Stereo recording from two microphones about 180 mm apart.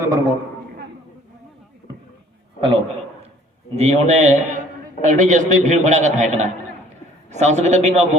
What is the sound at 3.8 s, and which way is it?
A man's voice, 35° right (ahead or behind).